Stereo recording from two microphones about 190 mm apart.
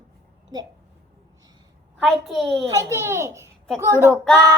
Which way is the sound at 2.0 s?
Centre (ahead or behind).